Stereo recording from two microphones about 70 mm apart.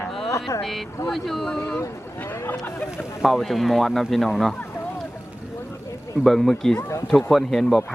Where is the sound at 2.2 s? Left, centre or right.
Left.